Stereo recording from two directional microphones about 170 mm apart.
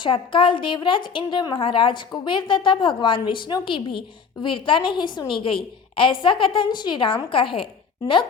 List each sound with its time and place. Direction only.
0.0 s a woman's voice: 30° left (ahead or behind)